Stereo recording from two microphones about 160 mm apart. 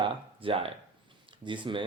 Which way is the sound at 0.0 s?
35° right (ahead or behind).